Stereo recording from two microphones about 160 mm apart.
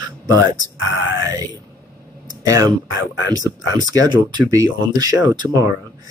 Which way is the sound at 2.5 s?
25° right (ahead or behind).